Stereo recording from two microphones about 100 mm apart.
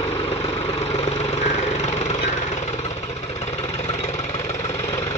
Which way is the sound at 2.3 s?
90° left.